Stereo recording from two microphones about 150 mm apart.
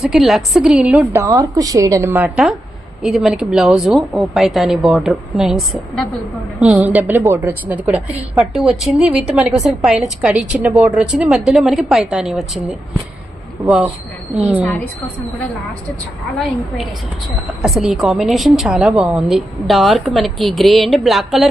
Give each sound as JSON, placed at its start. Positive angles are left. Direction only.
{"t": 0.0, "sound": "a woman's voice", "side_deg": 0}
{"t": 1.1, "sound": "a woman's voice", "side_deg": -20}
{"t": 3.0, "sound": "a woman's voice", "side_deg": 0}
{"t": 13.7, "sound": "a woman's voice", "side_deg": -5}
{"t": 17.6, "sound": "a woman's voice", "side_deg": 0}